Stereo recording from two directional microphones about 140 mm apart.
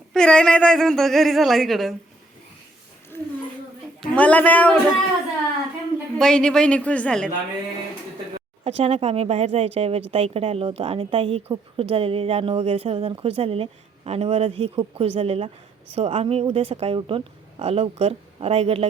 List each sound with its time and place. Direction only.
0.1 s speech: 5° left (ahead or behind)
3.1 s speech: 15° left (ahead or behind)
6.1 s speech: 5° left (ahead or behind)
8.6 s speech: 45° right (ahead or behind)